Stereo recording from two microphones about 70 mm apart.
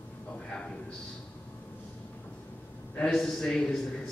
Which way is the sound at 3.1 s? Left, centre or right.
Centre.